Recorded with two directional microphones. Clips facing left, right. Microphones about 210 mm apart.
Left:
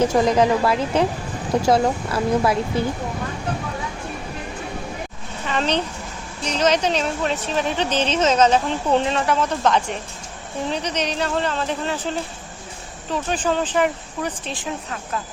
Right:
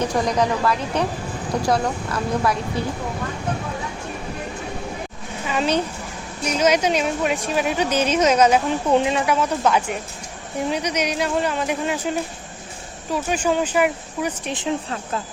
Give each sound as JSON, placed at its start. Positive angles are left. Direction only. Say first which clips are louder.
{"t": 0.0, "sound": "speech", "louder": "left 4 dB", "side_deg": 25}
{"t": 5.5, "sound": "speech", "louder": "right 1 dB", "side_deg": -10}